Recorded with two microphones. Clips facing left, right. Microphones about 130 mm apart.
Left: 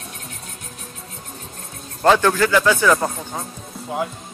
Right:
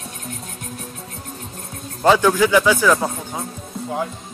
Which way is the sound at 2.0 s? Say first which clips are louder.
Right 1 dB; 5° right (ahead or behind).